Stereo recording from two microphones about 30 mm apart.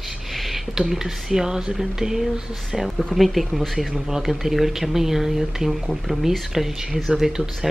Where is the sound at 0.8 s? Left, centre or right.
Centre.